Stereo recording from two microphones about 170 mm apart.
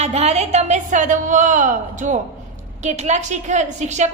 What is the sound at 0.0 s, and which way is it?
A woman's voice, 40° right (ahead or behind).